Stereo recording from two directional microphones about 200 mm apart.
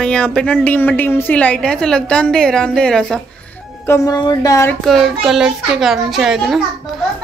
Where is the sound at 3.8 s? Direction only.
15° left (ahead or behind).